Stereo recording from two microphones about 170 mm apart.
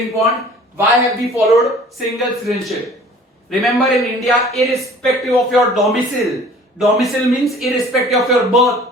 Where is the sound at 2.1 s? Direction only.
Centre (ahead or behind).